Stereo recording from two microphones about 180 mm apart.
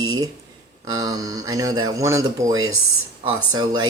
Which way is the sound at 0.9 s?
20° right (ahead or behind).